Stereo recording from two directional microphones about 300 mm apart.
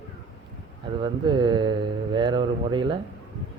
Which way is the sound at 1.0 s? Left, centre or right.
Centre.